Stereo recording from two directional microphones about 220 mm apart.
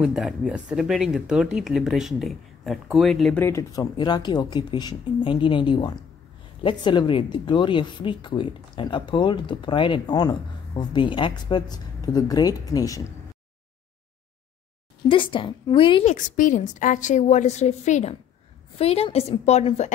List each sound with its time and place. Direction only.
0.0 s speech: 5° right (ahead or behind)
3.4 s speech: 15° left (ahead or behind)
15.0 s a woman's voice: 25° left (ahead or behind)